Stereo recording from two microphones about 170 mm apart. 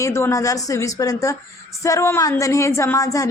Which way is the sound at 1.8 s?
15° left (ahead or behind).